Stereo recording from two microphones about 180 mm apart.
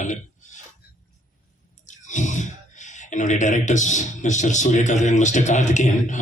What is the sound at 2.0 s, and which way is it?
Speech, 45° left (ahead or behind).